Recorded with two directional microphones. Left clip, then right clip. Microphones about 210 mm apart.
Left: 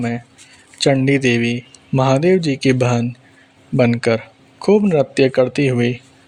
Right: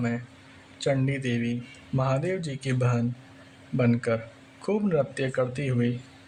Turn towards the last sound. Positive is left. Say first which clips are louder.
# left 12 dB
turn(degrees=35)  # may be behind; listen again after turning